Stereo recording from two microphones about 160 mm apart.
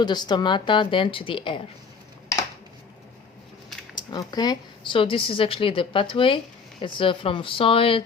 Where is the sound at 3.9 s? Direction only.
25° left (ahead or behind).